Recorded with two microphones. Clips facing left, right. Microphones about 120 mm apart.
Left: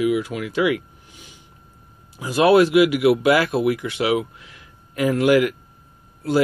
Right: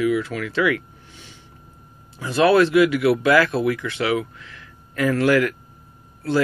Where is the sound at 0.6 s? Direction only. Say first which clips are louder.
Left 1 dB; 15° left (ahead or behind).